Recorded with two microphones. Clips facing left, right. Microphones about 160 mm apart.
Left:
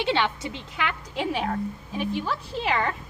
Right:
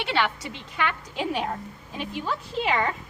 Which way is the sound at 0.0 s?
20° left (ahead or behind).